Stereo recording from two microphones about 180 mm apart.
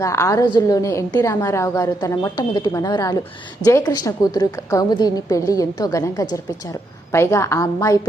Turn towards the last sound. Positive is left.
turn(degrees=20)  # may be behind; listen again after turning